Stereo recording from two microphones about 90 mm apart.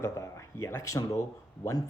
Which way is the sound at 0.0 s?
35° left (ahead or behind).